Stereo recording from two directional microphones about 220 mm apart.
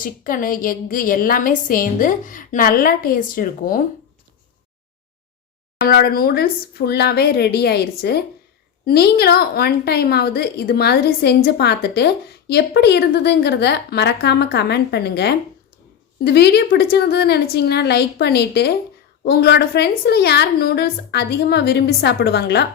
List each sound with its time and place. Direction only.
0.0 s a woman's voice: 40° left (ahead or behind)
5.8 s a woman's voice: 45° left (ahead or behind)